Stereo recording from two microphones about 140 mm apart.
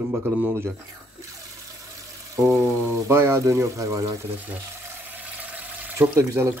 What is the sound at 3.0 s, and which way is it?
Speech, 20° right (ahead or behind).